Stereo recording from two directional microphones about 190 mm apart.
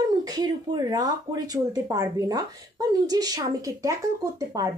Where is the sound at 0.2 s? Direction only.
20° right (ahead or behind).